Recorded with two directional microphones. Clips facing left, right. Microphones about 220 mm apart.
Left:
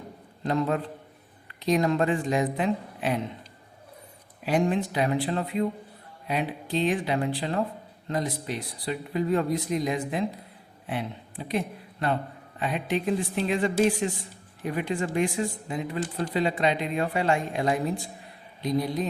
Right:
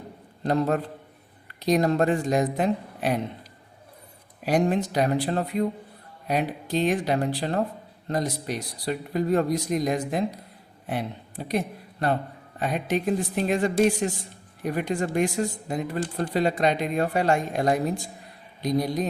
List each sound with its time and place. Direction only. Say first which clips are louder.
0.4 s speech: right 2 dB; 40° right (ahead or behind)
4.4 s speech: right 2 dB; 40° right (ahead or behind)